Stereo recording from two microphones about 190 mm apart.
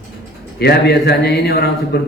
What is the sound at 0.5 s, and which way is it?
A man's voice, 60° left (ahead or behind).